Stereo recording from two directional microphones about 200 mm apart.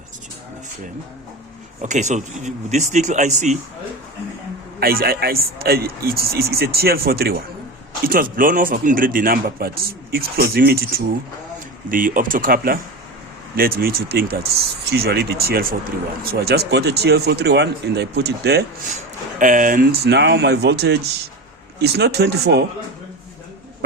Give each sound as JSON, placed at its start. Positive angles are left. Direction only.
{"t": 1.8, "sound": "speech", "side_deg": -35}
{"t": 4.8, "sound": "speech", "side_deg": -50}
{"t": 19.4, "sound": "speech", "side_deg": -40}